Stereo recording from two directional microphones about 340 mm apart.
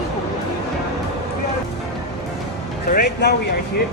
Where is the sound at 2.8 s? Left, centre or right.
Left.